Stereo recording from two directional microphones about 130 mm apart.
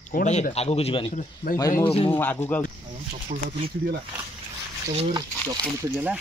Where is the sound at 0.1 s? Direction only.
65° left (ahead or behind); by 1.1 s 45° left (ahead or behind).